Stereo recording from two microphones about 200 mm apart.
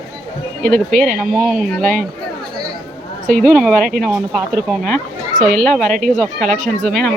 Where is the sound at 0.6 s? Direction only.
45° right (ahead or behind).